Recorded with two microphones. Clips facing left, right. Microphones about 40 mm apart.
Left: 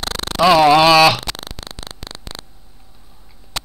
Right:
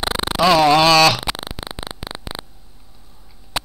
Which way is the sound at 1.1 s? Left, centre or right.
Centre.